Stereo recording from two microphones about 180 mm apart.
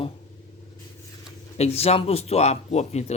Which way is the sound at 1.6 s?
35° left (ahead or behind).